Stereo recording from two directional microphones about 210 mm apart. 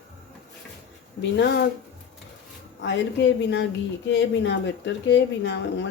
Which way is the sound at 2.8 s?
55° left (ahead or behind).